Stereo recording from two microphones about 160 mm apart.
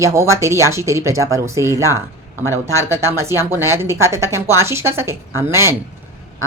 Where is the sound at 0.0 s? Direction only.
15° right (ahead or behind).